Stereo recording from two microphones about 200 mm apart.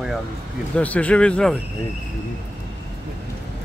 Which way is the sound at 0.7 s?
5° left (ahead or behind).